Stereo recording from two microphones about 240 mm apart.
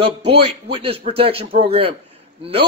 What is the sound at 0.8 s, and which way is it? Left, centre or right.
A man's voice, right.